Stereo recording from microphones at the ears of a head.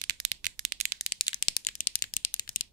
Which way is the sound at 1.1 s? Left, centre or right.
Left.